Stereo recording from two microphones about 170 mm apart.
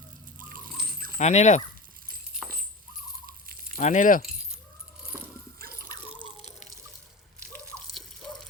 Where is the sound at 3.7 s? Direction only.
50° left (ahead or behind).